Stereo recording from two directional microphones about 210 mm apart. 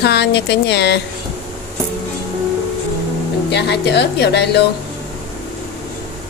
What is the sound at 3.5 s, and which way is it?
Speech, 55° left (ahead or behind).